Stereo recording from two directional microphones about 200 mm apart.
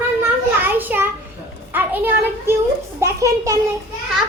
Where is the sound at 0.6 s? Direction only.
10° right (ahead or behind).